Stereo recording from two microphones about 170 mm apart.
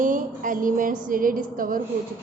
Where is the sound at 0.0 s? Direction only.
50° right (ahead or behind).